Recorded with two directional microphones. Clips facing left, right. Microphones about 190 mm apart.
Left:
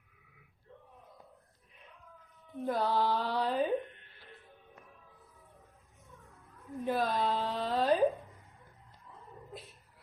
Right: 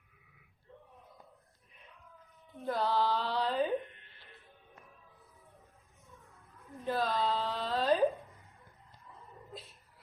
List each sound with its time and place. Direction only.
2.6 s mantra: 15° left (ahead or behind)
6.8 s a woman's voice: 20° left (ahead or behind)